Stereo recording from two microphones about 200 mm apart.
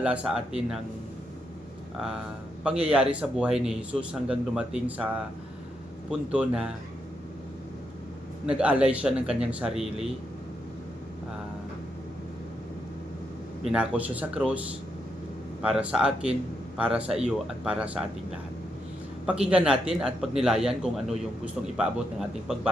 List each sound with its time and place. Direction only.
0.0 s a man's voice: 5° right (ahead or behind)
2.6 s a man's voice: 5° right (ahead or behind)
6.1 s a man's voice: 5° right (ahead or behind)
8.4 s a man's voice: 5° right (ahead or behind)
13.7 s speech: 5° right (ahead or behind)
15.6 s a man's voice: 5° right (ahead or behind)